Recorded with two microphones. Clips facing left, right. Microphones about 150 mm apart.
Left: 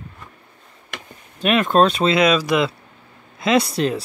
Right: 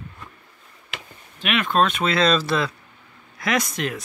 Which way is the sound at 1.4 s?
40° left (ahead or behind).